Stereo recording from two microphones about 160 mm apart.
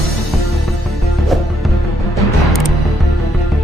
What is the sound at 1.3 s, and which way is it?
Music, centre (ahead or behind).